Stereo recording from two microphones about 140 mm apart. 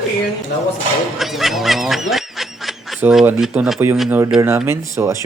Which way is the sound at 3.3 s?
5° right (ahead or behind).